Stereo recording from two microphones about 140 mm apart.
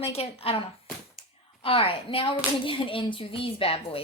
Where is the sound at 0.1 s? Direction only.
45° left (ahead or behind).